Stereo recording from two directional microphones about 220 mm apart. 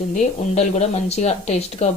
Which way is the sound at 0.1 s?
35° left (ahead or behind).